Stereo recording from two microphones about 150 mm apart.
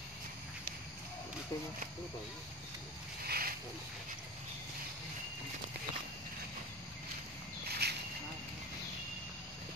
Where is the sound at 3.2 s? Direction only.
85° right.